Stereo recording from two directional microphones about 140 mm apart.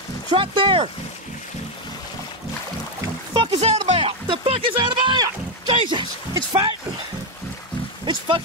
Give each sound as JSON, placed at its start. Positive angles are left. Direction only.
{"t": 0.3, "sound": "speech", "side_deg": -35}
{"t": 3.5, "sound": "speech", "side_deg": -50}
{"t": 8.0, "sound": "speech", "side_deg": -35}